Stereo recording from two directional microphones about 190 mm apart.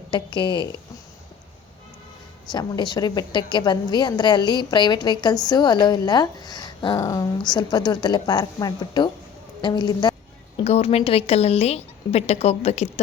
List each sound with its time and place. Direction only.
0.1 s a woman's voice: 25° left (ahead or behind)
2.5 s a woman's voice: 20° left (ahead or behind)
10.6 s a woman's voice: 35° left (ahead or behind)